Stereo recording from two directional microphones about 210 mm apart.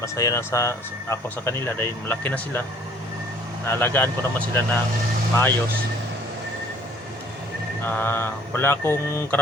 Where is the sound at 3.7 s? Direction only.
10° left (ahead or behind).